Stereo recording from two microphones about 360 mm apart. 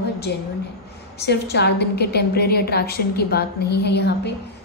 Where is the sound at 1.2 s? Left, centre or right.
Left.